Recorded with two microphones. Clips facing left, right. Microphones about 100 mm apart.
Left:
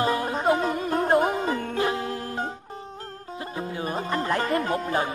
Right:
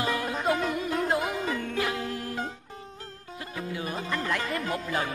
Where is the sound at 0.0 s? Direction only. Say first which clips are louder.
Left 4 dB; 35° left (ahead or behind).